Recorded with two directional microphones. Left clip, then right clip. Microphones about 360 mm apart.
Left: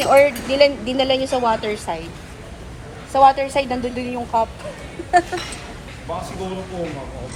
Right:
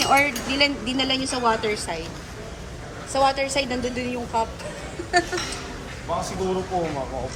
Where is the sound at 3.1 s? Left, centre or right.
Left.